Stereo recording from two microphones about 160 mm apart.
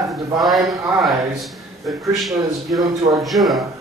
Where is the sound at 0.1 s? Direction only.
Centre (ahead or behind).